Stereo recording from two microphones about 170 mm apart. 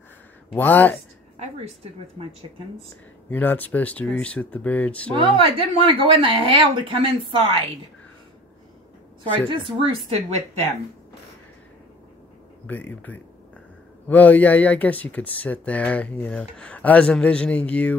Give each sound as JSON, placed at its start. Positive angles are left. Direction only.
{"t": 0.6, "sound": "speech", "side_deg": 10}
{"t": 1.4, "sound": "speech", "side_deg": -40}
{"t": 3.3, "sound": "speech", "side_deg": 10}
{"t": 5.1, "sound": "speech", "side_deg": -30}
{"t": 9.5, "sound": "speech", "side_deg": -30}
{"t": 14.0, "sound": "speech", "side_deg": 10}